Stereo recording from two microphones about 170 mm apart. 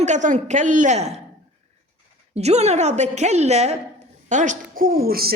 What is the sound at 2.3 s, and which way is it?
A woman's voice, 40° right (ahead or behind).